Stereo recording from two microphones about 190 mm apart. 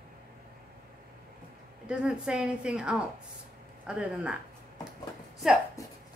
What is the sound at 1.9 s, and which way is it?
A woman's voice, 5° right (ahead or behind).